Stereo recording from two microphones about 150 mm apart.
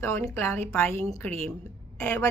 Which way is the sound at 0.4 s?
15° left (ahead or behind).